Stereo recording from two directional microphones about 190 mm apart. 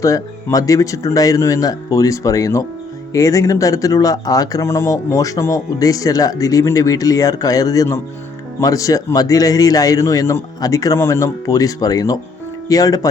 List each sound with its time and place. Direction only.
0.0 s speech: 15° left (ahead or behind)